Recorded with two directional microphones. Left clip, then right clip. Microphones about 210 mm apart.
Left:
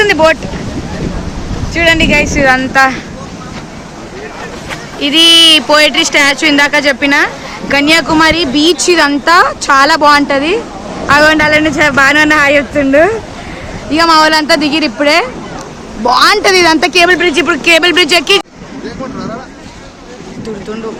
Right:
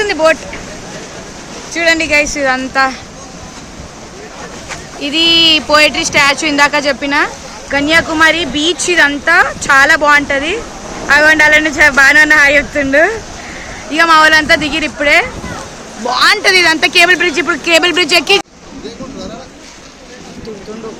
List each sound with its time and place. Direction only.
0.0 s vehicle: 5° left (ahead or behind)
1.7 s speech: 5° right (ahead or behind)
4.9 s a woman's voice: centre (ahead or behind); by 17.1 s 15° left (ahead or behind)
17.1 s speech: centre (ahead or behind)